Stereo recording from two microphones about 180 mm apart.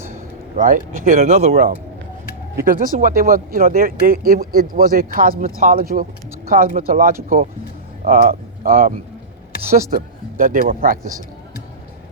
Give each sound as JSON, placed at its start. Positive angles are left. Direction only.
{"t": 0.5, "sound": "speech", "side_deg": -45}
{"t": 2.6, "sound": "speech", "side_deg": -50}
{"t": 9.9, "sound": "speech", "side_deg": -50}